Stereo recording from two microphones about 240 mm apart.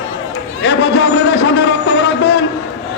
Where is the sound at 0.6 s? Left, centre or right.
Left.